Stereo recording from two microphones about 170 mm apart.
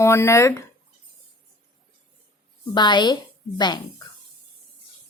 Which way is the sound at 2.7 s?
25° left (ahead or behind).